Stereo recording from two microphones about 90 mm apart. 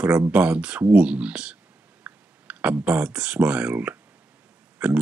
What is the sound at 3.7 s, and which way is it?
Speech, 25° right (ahead or behind).